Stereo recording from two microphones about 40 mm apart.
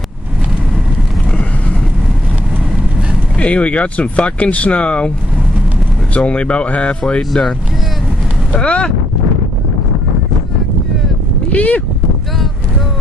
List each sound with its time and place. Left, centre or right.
3.3 s speech: left
6.1 s speech: left
8.5 s boat: left
11.5 s speech: left